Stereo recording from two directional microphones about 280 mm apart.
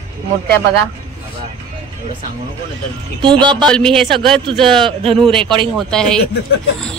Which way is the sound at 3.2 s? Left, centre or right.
Centre.